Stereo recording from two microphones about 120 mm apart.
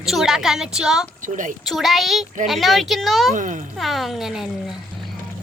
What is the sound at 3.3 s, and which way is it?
Speech, 90° right.